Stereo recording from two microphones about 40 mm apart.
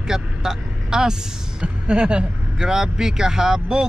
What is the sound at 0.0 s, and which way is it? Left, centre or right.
Vehicle, centre.